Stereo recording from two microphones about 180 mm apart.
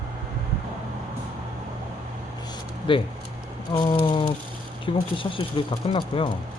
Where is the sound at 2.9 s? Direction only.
30° left (ahead or behind).